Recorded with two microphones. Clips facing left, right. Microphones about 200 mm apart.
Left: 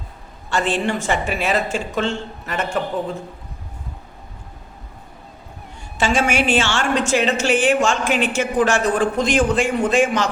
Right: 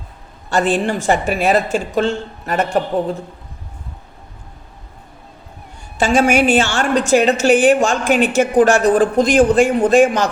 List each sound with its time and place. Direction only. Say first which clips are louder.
0.5 s a woman's voice: right 4 dB; 40° right (ahead or behind)
6.0 s a woman's voice: right 5 dB; 40° right (ahead or behind)